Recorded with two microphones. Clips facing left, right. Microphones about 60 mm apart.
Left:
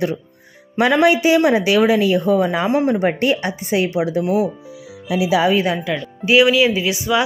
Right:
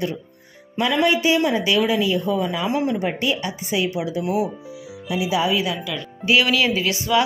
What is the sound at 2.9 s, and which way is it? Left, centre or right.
A woman's voice, left.